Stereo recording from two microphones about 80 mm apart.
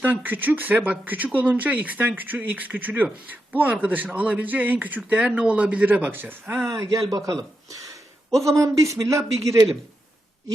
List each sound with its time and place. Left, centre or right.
0.0 s speech: right
6.7 s speech: right
8.3 s a man's voice: centre
8.5 s speech: right